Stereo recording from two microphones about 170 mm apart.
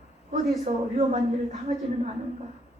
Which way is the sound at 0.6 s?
40° right (ahead or behind).